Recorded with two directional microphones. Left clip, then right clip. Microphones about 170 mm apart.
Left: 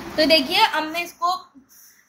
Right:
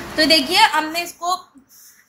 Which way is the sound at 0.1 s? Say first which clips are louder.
Right 2 dB; 20° left (ahead or behind).